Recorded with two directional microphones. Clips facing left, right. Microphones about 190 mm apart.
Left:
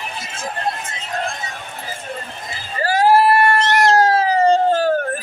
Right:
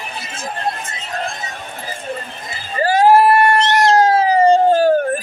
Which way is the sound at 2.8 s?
20° right (ahead or behind).